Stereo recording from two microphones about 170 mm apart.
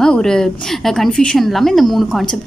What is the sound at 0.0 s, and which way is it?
A woman's voice, 5° left (ahead or behind).